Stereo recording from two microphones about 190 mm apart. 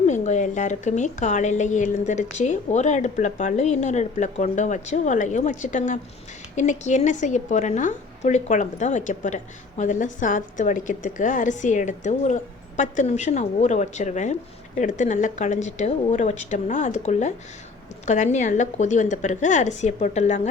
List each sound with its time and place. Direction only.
0.1 s a woman's voice: 40° left (ahead or behind)